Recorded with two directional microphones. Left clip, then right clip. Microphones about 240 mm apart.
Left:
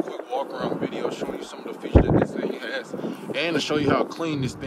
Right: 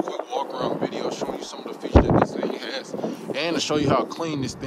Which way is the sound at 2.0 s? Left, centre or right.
Centre.